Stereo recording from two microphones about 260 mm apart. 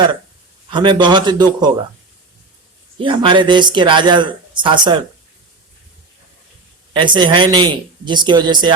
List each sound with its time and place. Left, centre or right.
0.7 s speech: centre
3.0 s speech: centre
6.9 s speech: centre